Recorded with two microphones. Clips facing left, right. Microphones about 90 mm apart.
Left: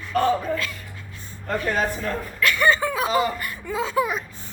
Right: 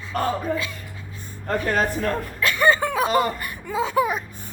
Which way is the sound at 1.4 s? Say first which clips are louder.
Right 1 dB; 50° right (ahead or behind).